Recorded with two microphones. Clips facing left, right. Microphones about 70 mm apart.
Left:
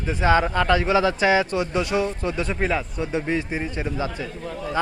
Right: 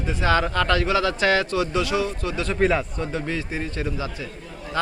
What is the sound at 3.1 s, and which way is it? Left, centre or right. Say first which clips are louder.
A man's voice: left 4 dB; left.